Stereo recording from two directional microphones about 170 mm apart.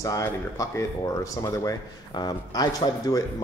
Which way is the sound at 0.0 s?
20° left (ahead or behind).